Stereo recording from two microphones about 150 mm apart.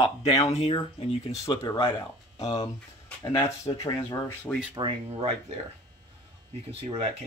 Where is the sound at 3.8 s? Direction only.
20° left (ahead or behind).